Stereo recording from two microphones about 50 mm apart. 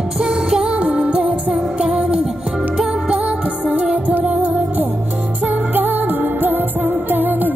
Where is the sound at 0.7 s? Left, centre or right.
Right; by 3.1 s centre.